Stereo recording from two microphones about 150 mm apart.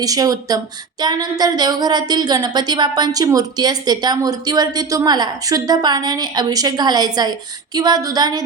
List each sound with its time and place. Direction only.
0.0 s speech: 25° right (ahead or behind)